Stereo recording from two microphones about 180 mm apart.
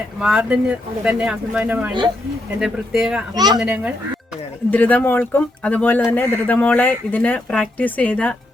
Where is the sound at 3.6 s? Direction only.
5° right (ahead or behind).